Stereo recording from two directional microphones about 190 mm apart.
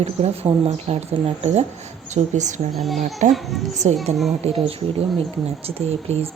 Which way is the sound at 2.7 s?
Centre (ahead or behind).